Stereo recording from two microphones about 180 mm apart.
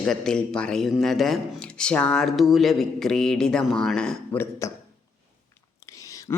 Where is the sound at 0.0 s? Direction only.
5° left (ahead or behind).